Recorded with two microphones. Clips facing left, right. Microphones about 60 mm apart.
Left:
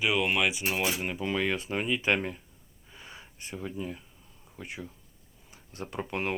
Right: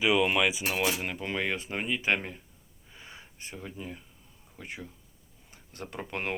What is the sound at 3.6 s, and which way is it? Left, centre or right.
Speech, right.